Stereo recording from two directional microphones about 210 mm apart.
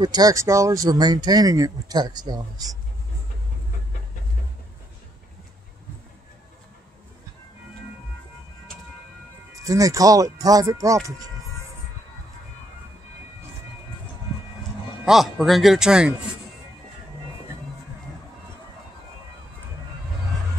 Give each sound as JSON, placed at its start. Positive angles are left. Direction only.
{"t": 0.0, "sound": "speech", "side_deg": -20}
{"t": 9.7, "sound": "speech", "side_deg": -15}
{"t": 15.0, "sound": "speech", "side_deg": 0}